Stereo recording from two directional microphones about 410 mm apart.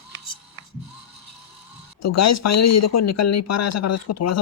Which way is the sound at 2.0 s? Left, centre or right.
Left.